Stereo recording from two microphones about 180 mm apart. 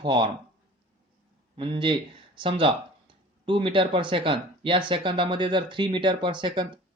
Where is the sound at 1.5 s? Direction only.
25° right (ahead or behind).